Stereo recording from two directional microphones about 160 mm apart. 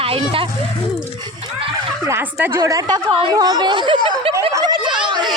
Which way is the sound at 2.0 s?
15° right (ahead or behind).